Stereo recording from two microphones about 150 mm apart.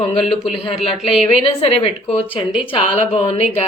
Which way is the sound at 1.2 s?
40° left (ahead or behind).